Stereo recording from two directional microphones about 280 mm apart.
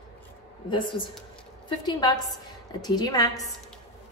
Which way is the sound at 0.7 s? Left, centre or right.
Centre.